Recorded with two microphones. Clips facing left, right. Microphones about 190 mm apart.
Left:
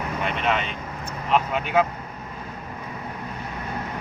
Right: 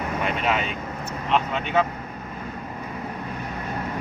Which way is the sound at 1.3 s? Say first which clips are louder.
Left 1 dB; 5° left (ahead or behind).